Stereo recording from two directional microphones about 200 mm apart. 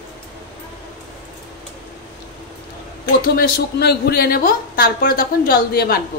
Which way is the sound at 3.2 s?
50° left (ahead or behind).